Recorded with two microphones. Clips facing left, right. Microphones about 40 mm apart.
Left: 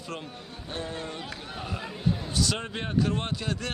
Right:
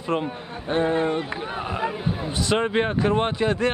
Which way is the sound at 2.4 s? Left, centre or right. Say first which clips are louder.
Right 13 dB; right.